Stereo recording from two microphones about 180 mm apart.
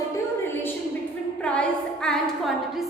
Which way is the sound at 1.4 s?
5° left (ahead or behind).